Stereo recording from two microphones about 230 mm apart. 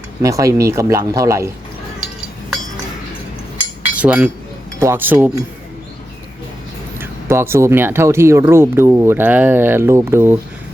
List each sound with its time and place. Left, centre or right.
0.2 s speech: centre
3.8 s chink: centre
4.8 s speech: centre
7.0 s speech: centre